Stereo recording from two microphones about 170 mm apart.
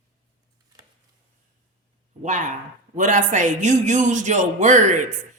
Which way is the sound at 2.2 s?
45° right (ahead or behind).